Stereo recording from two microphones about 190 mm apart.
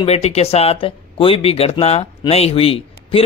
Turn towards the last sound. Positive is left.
turn(degrees=30)  # may be behind; listen again after turning